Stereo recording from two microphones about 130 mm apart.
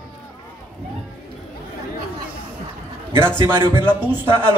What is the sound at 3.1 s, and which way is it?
Speech, 15° right (ahead or behind).